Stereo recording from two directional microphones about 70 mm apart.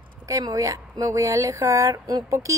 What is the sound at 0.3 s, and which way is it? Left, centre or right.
A woman's voice, right.